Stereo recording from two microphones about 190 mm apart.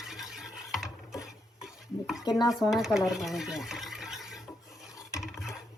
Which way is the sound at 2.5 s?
Centre (ahead or behind).